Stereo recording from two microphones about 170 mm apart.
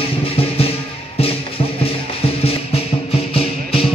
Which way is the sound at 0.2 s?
35° left (ahead or behind).